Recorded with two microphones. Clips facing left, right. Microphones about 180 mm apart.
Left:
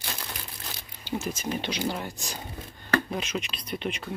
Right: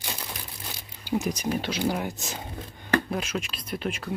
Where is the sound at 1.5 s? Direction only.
5° right (ahead or behind).